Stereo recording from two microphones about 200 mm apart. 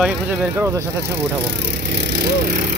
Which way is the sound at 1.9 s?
55° right (ahead or behind).